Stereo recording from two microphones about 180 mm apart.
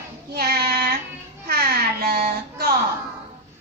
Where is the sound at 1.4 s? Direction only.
55° right (ahead or behind).